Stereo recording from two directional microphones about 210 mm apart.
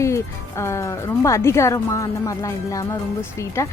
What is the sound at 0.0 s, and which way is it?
Speech, 15° left (ahead or behind).